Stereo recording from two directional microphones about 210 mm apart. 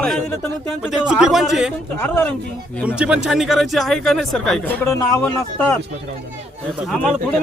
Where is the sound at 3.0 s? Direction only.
5° right (ahead or behind).